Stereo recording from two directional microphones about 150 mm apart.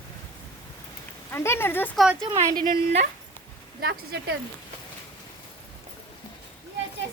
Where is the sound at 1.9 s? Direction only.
5° right (ahead or behind).